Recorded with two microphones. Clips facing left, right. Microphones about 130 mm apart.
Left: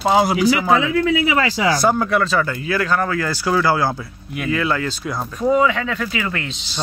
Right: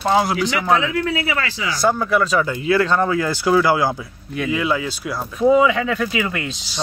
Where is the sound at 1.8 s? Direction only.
Centre (ahead or behind).